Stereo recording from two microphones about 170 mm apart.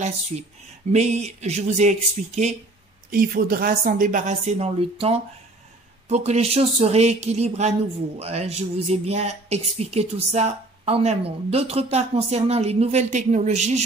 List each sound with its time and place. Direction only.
0.9 s speech: 40° right (ahead or behind)
3.1 s speech: 60° right (ahead or behind); by 13.8 s 40° right (ahead or behind)